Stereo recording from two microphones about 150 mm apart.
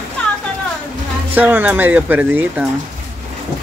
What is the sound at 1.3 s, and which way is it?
Speech, 10° right (ahead or behind).